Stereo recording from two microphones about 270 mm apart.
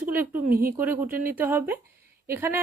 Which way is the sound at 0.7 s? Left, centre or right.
Centre.